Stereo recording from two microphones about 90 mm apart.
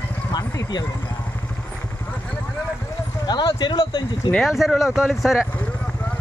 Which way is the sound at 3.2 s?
55° left (ahead or behind).